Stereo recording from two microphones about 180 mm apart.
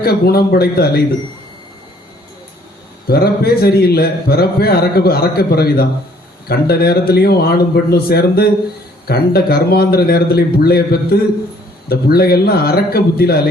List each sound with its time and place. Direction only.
0.0 s a man's voice: 60° left (ahead or behind)
3.1 s a man's voice: 60° left (ahead or behind)